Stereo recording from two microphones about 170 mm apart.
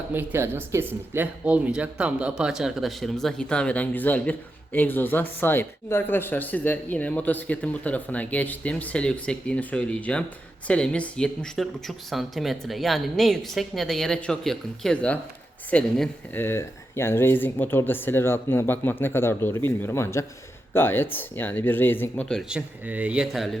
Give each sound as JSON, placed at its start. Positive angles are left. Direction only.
{"t": 0.1, "sound": "speech", "side_deg": -10}